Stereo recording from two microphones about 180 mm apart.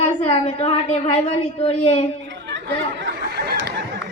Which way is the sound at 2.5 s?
80° right.